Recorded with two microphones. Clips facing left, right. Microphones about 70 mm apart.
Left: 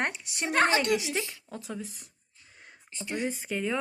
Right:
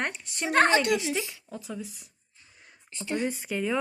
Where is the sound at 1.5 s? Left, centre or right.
Left.